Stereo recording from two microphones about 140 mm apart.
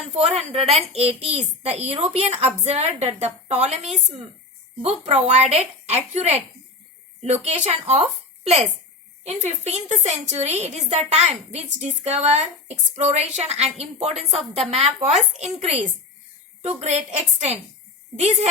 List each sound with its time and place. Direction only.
0.1 s a woman's voice: 45° right (ahead or behind)
7.4 s a woman's voice: 50° right (ahead or behind)
9.2 s a woman's voice: 50° right (ahead or behind)
18.2 s a woman's voice: 50° right (ahead or behind)